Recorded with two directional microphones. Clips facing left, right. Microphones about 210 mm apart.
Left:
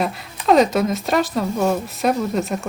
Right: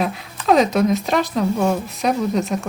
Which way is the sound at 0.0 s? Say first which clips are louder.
Even; centre (ahead or behind).